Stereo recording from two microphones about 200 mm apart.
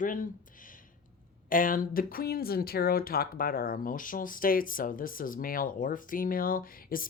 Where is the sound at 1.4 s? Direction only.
45° left (ahead or behind).